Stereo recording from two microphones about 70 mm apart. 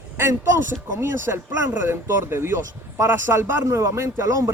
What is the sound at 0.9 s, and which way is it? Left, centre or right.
Speech, right.